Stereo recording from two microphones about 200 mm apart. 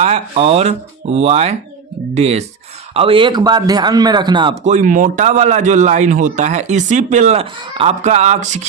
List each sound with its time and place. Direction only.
0.0 s a man's voice: 30° right (ahead or behind)
4.6 s a man's voice: 40° right (ahead or behind)